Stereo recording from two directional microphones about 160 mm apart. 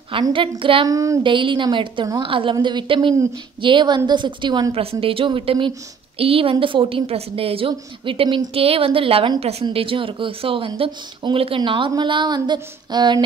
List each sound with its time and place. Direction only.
0.1 s a woman's voice: 30° right (ahead or behind)
0.8 s a woman's voice: 20° right (ahead or behind)